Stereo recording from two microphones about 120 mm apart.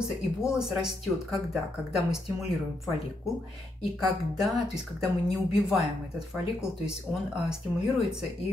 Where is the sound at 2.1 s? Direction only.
Centre (ahead or behind).